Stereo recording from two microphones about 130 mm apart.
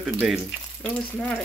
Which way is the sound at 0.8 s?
10° left (ahead or behind).